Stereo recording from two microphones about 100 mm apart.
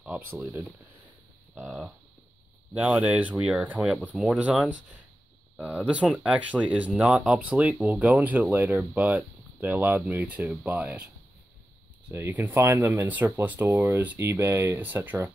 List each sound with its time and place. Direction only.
0.0 s speech: 15° right (ahead or behind)
1.5 s speech: 5° right (ahead or behind)
2.7 s speech: 15° right (ahead or behind)
5.9 s speech: 10° right (ahead or behind)
12.1 s speech: 20° right (ahead or behind)